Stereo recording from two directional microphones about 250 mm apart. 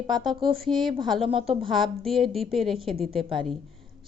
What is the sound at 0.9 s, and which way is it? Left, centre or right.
A woman's voice, centre.